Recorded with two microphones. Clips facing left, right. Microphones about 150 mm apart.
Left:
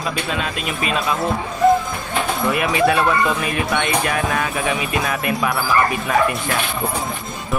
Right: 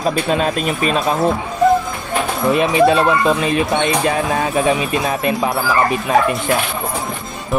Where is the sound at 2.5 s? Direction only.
25° right (ahead or behind).